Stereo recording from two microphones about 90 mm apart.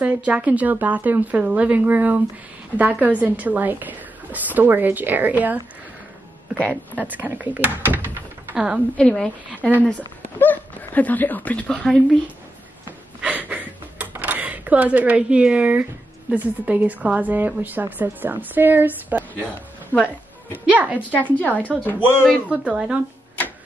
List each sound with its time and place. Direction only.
0.0 s a woman's voice: 15° right (ahead or behind)
6.7 s a woman's voice: 20° right (ahead or behind)
8.9 s speech: 10° left (ahead or behind)
13.2 s speech: 20° right (ahead or behind)
19.9 s speech: 20° left (ahead or behind)
20.5 s a woman's voice: 15° right (ahead or behind)
21.1 s speech: 15° left (ahead or behind)
22.5 s a woman's voice: 15° right (ahead or behind)